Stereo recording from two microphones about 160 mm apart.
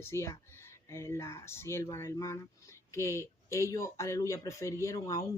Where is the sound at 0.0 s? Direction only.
15° left (ahead or behind).